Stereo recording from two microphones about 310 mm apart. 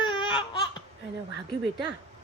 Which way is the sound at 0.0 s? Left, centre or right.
Centre.